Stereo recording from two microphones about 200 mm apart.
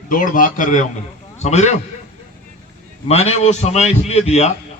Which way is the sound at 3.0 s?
30° left (ahead or behind).